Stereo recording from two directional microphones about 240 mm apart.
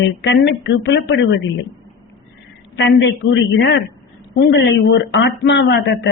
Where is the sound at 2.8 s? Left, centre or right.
Left.